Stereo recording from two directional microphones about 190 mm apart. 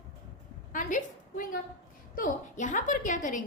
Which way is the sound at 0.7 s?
45° left (ahead or behind).